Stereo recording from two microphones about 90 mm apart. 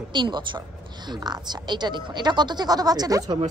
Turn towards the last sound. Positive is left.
turn(degrees=-45)  # may be behind; listen again after turning